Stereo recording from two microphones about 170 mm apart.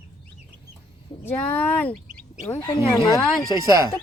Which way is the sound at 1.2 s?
10° left (ahead or behind).